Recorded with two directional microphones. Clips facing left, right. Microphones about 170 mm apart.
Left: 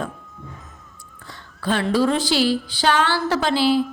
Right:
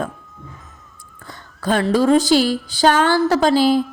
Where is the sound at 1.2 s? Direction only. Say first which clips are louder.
Right 3 dB; 45° right (ahead or behind).